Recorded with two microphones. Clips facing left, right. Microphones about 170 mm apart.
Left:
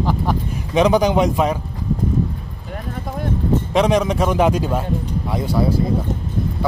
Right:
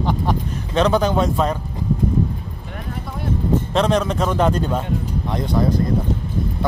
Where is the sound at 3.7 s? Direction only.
10° left (ahead or behind).